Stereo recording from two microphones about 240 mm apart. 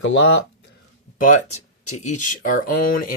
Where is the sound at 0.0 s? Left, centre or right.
Left.